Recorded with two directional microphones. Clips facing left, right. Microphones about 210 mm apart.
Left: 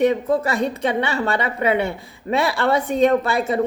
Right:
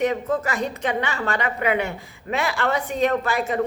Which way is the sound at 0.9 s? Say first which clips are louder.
Left 3 dB; 30° left (ahead or behind).